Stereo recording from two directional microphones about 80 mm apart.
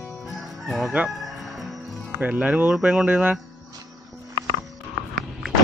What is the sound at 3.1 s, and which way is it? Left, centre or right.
Speech, centre.